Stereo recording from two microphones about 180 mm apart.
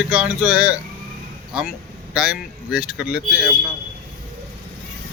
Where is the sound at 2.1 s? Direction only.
5° right (ahead or behind).